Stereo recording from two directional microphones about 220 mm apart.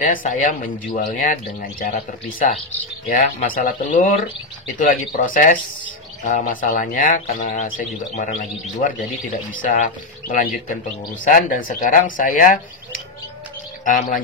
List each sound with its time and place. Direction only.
0.0 s speech: 35° left (ahead or behind)
5.1 s speech: 35° left (ahead or behind)